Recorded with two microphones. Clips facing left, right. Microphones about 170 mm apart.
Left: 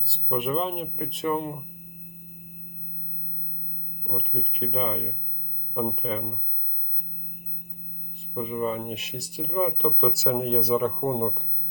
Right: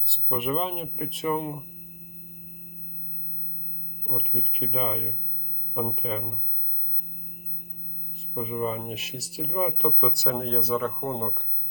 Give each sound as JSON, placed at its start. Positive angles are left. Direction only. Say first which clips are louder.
{"t": 0.0, "sound": "speech", "louder": "left 2 dB", "side_deg": 0}
{"t": 4.1, "sound": "speech", "louder": "left 1 dB", "side_deg": 0}
{"t": 8.4, "sound": "speech", "louder": "left 1 dB", "side_deg": 0}